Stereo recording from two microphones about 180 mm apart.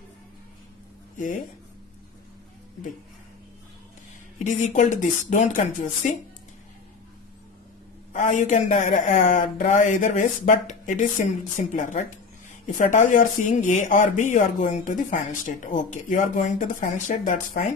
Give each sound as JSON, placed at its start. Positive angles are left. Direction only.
{"t": 4.7, "sound": "speech", "side_deg": 45}
{"t": 8.1, "sound": "speech", "side_deg": 40}